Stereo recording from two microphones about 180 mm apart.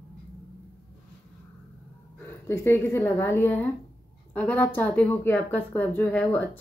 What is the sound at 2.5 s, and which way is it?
Speech, 15° left (ahead or behind).